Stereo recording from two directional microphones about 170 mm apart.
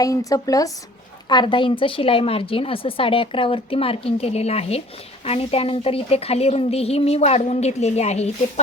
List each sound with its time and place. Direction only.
0.0 s a woman's voice: 20° left (ahead or behind); by 8.6 s 40° left (ahead or behind)